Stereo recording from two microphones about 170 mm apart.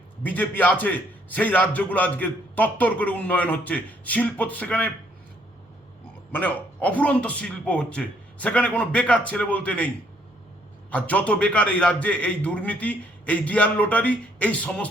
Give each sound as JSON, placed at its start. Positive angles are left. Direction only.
{"t": 0.2, "sound": "a man's voice", "side_deg": 10}
{"t": 6.3, "sound": "a man's voice", "side_deg": 10}
{"t": 10.9, "sound": "a man's voice", "side_deg": 10}